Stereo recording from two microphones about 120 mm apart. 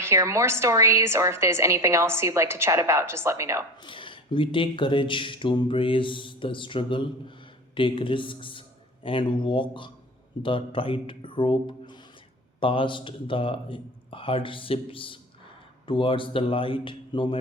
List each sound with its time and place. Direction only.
0.0 s a woman's voice: 25° right (ahead or behind)
3.8 s speech: 45° left (ahead or behind)